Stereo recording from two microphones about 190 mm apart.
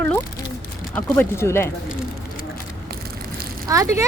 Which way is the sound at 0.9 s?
10° left (ahead or behind).